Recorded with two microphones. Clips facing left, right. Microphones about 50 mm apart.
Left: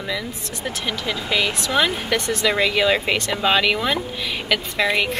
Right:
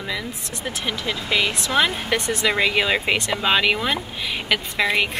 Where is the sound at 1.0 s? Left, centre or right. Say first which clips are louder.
Even; centre.